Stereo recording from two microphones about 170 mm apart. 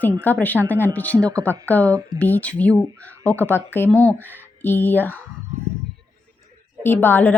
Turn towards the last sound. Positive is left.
turn(degrees=10)  # may be behind; listen again after turning